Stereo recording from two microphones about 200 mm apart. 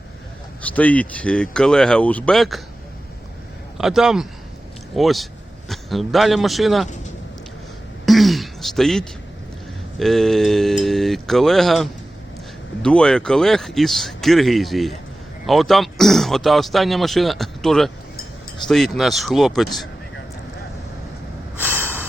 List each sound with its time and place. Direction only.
0.6 s speech: 5° left (ahead or behind)
3.8 s a man's voice: centre (ahead or behind)
8.0 s throat clearing: centre (ahead or behind)
10.0 s speech: centre (ahead or behind)
21.6 s snort: 10° right (ahead or behind)